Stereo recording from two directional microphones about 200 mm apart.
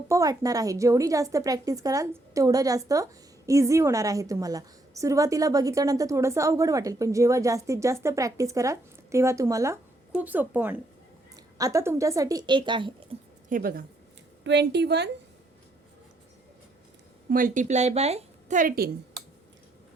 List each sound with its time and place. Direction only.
0.1 s a woman's voice: 15° right (ahead or behind)
13.5 s speech: 45° right (ahead or behind)
14.4 s a woman's voice: 60° right (ahead or behind)
17.2 s a woman's voice: 45° right (ahead or behind)